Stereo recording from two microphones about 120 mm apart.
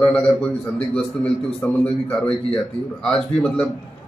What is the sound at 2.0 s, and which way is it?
A man's voice, 10° left (ahead or behind).